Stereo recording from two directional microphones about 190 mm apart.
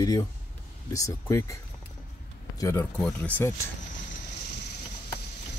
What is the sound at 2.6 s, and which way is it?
Speech, 15° left (ahead or behind).